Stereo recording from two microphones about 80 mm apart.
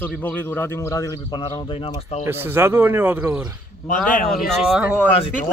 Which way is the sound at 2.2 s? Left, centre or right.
Right.